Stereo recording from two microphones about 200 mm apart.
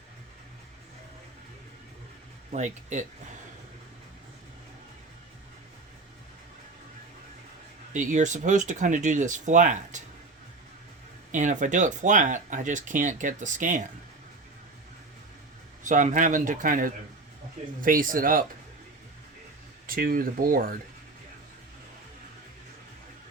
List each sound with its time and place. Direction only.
2.5 s speech: 35° right (ahead or behind)
7.9 s speech: 40° right (ahead or behind)
11.3 s speech: 40° right (ahead or behind)
15.8 s speech: 40° right (ahead or behind)
19.9 s speech: 45° right (ahead or behind)